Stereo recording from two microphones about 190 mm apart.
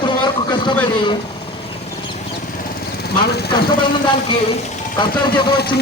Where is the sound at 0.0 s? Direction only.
25° left (ahead or behind).